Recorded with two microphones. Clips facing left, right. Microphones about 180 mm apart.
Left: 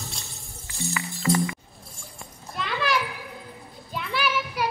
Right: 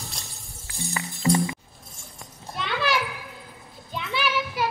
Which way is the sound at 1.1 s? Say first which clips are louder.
Right 2 dB; 20° right (ahead or behind).